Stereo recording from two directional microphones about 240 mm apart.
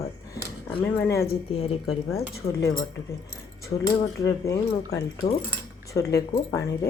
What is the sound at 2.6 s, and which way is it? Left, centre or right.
Speech, centre.